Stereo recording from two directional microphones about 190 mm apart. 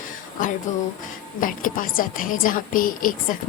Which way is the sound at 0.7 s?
40° left (ahead or behind).